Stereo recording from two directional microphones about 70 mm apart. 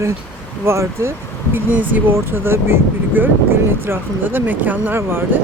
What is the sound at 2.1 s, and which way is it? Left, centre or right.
Speech, right.